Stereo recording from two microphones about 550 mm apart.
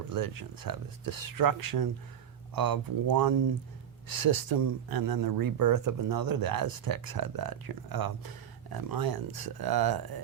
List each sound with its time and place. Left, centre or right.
0.1 s speech: right